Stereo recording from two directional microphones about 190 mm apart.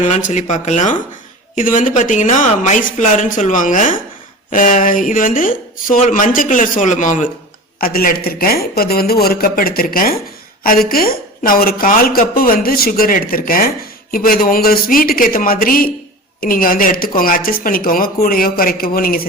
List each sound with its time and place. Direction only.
0.0 s a woman's voice: 40° left (ahead or behind)